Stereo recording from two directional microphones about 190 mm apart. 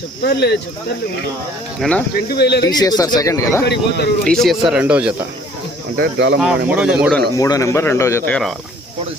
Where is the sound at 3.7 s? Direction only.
60° left (ahead or behind).